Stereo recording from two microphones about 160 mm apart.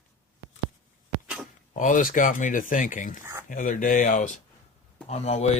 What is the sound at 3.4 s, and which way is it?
Speech, 55° left (ahead or behind).